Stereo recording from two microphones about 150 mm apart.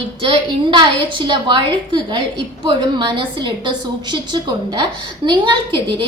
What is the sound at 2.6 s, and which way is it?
A woman's voice, 35° right (ahead or behind).